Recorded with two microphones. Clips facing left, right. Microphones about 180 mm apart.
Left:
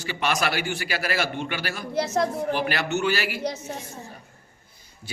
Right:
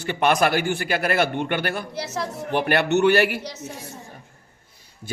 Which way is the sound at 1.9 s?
50° left (ahead or behind).